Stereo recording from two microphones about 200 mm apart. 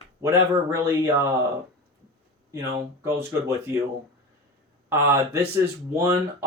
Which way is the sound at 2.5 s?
15° right (ahead or behind).